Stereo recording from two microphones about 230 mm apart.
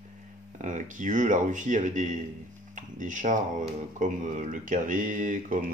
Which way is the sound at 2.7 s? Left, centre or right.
Right.